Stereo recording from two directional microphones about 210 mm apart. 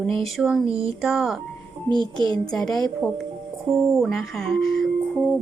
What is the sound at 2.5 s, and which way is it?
Speech, 5° left (ahead or behind).